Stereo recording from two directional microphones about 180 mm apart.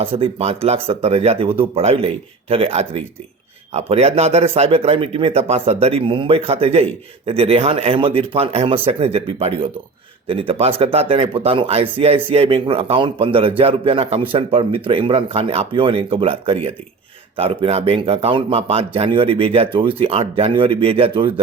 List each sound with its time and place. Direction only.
0.0 s speech: 30° right (ahead or behind)